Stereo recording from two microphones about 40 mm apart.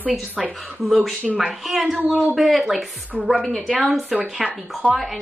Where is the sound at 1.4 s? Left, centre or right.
Centre.